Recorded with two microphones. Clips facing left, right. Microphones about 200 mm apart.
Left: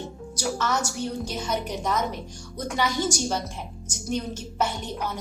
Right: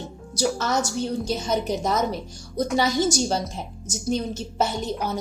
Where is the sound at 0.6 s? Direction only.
40° right (ahead or behind).